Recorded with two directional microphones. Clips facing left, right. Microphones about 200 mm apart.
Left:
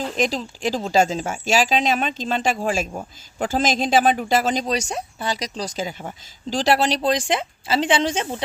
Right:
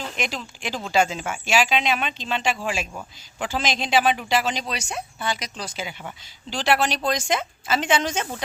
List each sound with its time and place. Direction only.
0.2 s speech: 40° left (ahead or behind)